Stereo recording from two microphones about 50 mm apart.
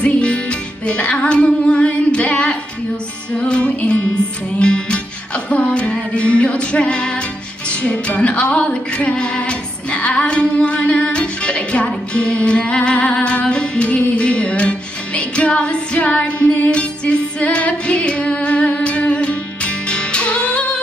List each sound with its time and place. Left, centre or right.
0.0 s music: left